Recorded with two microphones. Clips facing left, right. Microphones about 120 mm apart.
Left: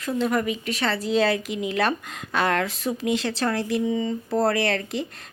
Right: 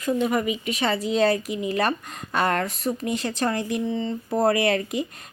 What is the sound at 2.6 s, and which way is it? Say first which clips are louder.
Speech: even; 90° left.